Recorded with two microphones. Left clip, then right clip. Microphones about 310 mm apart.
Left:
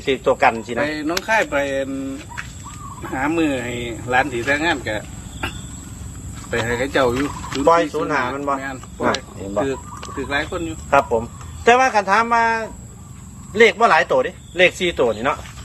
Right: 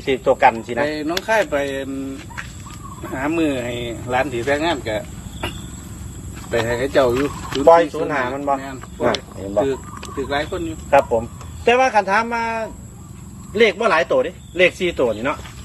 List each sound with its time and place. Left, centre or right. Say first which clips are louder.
0.0 s speech: right 1 dB; centre
3.1 s speech: left 1 dB; centre
6.7 s speech: right 1 dB; centre
7.2 s speech: right 2 dB; right
7.5 s speech: right 3 dB; centre
13.6 s speech: left 2 dB; centre